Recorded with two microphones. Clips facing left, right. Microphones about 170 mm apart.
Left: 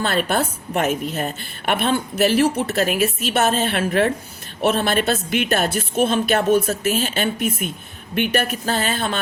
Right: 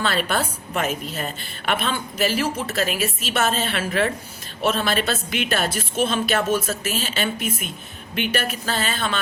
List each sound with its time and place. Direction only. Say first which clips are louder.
0.0 s a woman's voice: left 3 dB; 50° left (ahead or behind)